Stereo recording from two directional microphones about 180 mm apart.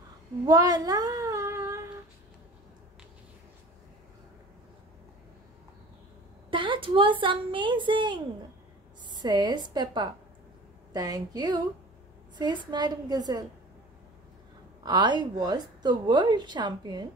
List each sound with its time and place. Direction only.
0.5 s a sound: 20° right (ahead or behind)
6.5 s a woman's voice: 25° right (ahead or behind)
14.8 s a woman's voice: 25° right (ahead or behind)